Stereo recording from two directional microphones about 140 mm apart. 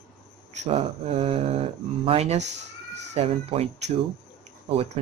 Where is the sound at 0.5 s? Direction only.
50° right (ahead or behind).